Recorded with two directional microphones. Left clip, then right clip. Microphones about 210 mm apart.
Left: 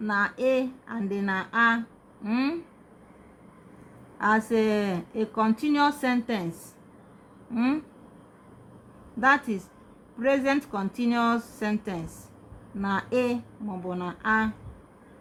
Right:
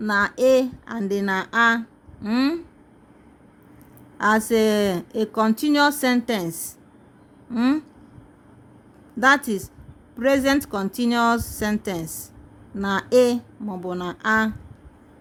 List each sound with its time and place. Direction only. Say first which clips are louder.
0.0 s a woman's voice: right 6 dB; 40° right (ahead or behind)
4.2 s a woman's voice: right 5 dB; 40° right (ahead or behind)
7.5 s a woman's voice: right 5 dB; 35° right (ahead or behind)
9.2 s a woman's voice: right 5 dB; 40° right (ahead or behind)